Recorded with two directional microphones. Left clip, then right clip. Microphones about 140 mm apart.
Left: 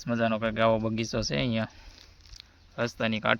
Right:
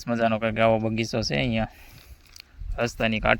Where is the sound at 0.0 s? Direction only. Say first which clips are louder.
Right 4 dB; 25° right (ahead or behind).